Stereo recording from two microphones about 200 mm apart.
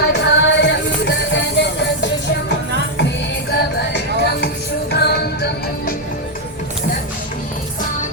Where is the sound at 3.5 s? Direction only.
55° left (ahead or behind).